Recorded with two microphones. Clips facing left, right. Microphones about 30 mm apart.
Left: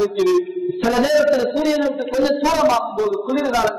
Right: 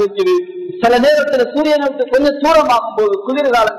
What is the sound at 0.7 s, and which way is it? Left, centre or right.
Speech, right.